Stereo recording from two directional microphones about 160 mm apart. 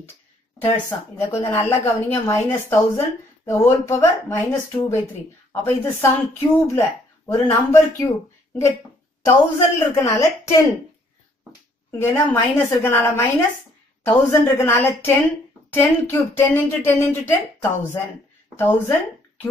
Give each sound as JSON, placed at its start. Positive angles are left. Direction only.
{"t": 0.6, "sound": "a woman's voice", "side_deg": 20}
{"t": 9.2, "sound": "a woman's voice", "side_deg": 15}
{"t": 12.0, "sound": "a woman's voice", "side_deg": 15}
{"t": 18.6, "sound": "a woman's voice", "side_deg": 15}